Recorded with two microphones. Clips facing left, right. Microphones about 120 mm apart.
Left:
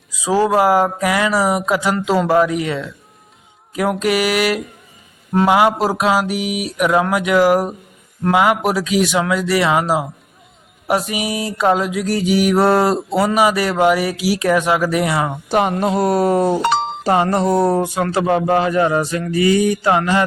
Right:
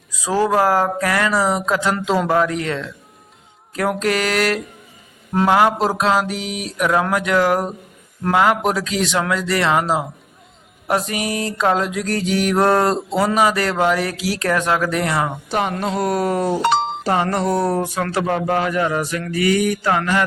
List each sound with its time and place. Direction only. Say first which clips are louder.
0.2 s mantra: left 2 dB; 10° left (ahead or behind)
8.2 s speech: left 1 dB; 5° left (ahead or behind)
10.8 s mantra: left 2 dB; 5° left (ahead or behind)
16.0 s speech: left 4 dB; 35° left (ahead or behind)